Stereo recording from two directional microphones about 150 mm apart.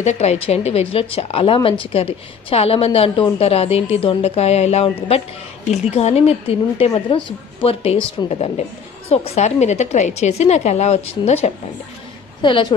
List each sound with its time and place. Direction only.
0.0 s a woman's voice: 45° left (ahead or behind)
12.4 s a woman's voice: 30° left (ahead or behind)